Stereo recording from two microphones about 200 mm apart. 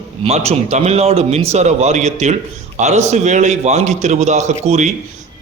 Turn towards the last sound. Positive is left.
turn(degrees=-35)  # may be behind; listen again after turning